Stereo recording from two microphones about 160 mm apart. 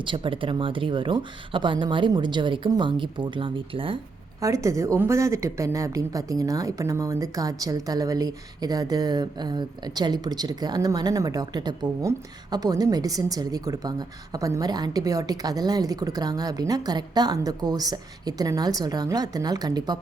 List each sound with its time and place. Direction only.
0.0 s speech: 30° right (ahead or behind)
4.4 s a woman's voice: 20° right (ahead or behind)